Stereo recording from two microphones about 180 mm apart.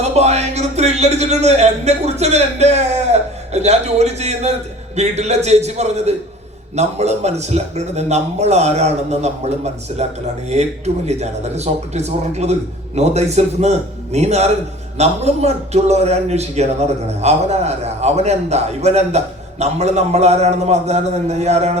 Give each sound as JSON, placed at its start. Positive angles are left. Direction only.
{"t": 0.0, "sound": "a man's voice", "side_deg": -35}